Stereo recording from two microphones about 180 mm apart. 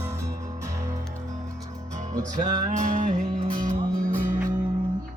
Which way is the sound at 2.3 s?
45° right (ahead or behind).